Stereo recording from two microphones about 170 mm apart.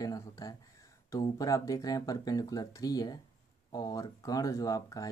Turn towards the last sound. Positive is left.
turn(degrees=20)  # may be behind; listen again after turning